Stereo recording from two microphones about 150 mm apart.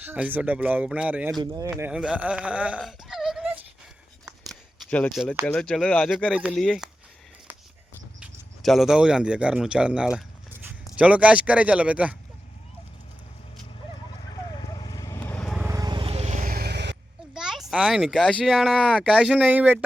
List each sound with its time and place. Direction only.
0.0 s speech: 10° right (ahead or behind)
1.4 s speech: 25° right (ahead or behind)
1.8 s speech: 5° right (ahead or behind)
4.3 s a sound: centre (ahead or behind)
4.9 s speech: 10° left (ahead or behind)
5.1 s speech: centre (ahead or behind)
8.2 s speech: centre (ahead or behind)
14.2 s vehicle: 30° left (ahead or behind)
15.4 s vehicle: centre (ahead or behind)
15.6 s vehicle: 20° right (ahead or behind); by 16.5 s 50° right (ahead or behind)
16.5 s vehicle: 90° right
17.3 s a child's voice: 5° right (ahead or behind)
19.1 s speech: 5° right (ahead or behind)